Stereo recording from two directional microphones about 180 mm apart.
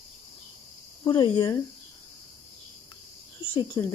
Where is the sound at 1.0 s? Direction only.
30° left (ahead or behind).